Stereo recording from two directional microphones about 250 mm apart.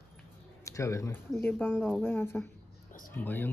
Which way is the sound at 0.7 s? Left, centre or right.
Centre.